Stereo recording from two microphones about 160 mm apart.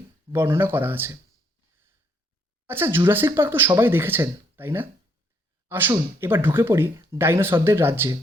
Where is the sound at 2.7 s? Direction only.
15° right (ahead or behind).